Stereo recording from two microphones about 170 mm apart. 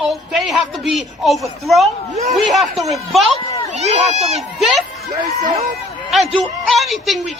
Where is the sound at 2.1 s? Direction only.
40° right (ahead or behind).